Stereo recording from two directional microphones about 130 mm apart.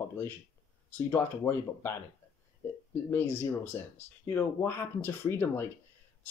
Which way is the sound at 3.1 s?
15° left (ahead or behind).